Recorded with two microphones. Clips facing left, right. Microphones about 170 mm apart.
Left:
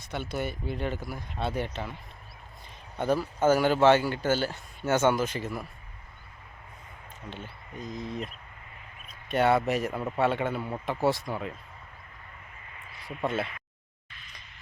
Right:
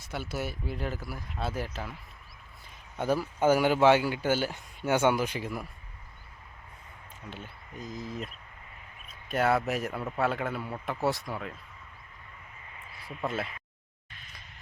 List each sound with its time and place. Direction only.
0.0 s speech: 5° right (ahead or behind)
3.0 s speech: 10° right (ahead or behind)
7.4 s speech: centre (ahead or behind)
13.1 s speech: centre (ahead or behind)
14.1 s a sound: 45° right (ahead or behind)